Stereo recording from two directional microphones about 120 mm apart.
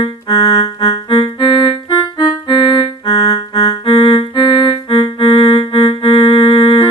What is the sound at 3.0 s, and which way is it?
Music, 45° left (ahead or behind).